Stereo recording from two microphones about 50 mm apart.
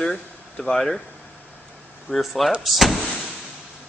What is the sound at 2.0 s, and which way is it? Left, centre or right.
Speech, centre.